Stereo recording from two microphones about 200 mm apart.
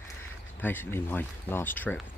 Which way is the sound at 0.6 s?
10° left (ahead or behind).